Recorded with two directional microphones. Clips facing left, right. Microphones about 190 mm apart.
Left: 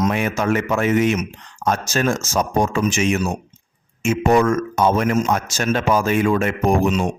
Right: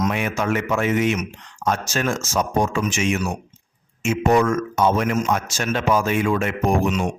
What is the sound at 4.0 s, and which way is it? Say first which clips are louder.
Speech: left 2 dB; 50° left (ahead or behind).